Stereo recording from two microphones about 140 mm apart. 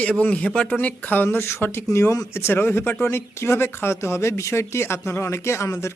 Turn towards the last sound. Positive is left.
turn(degrees=20)  # may be behind; listen again after turning